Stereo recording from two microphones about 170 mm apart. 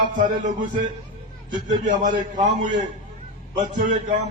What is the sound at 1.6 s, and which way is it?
A man's voice, 50° right (ahead or behind).